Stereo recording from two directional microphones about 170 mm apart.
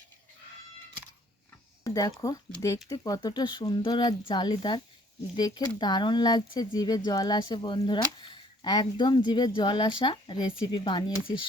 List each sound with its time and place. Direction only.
1.8 s speech: 20° left (ahead or behind)